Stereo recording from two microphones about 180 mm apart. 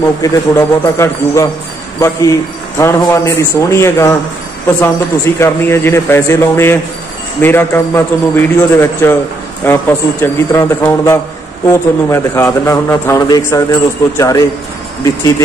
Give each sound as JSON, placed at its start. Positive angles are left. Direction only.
{"t": 0.2, "sound": "a man's voice", "side_deg": 15}